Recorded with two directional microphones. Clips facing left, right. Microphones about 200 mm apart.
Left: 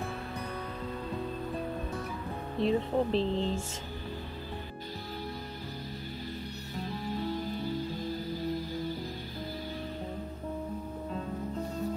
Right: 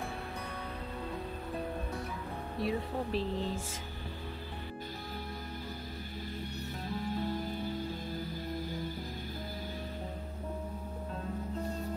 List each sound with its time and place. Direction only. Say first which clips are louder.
2.6 s speech: left 7 dB; 25° left (ahead or behind)